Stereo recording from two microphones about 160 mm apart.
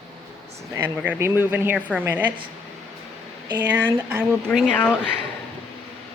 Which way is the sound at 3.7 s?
10° right (ahead or behind).